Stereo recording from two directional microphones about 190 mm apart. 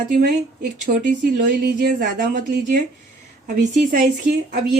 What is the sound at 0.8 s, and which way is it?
Speech, 45° right (ahead or behind).